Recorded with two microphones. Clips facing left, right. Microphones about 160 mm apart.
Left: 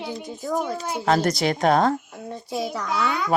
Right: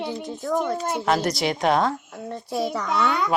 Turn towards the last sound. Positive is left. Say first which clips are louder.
# right 2 dB
turn(degrees=0)  # may be behind; listen again after turning